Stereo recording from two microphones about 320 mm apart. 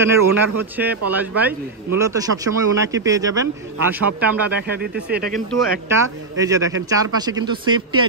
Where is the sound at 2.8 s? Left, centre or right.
Centre.